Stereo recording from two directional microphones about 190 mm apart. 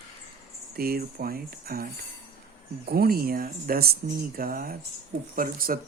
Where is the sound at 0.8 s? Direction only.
50° right (ahead or behind).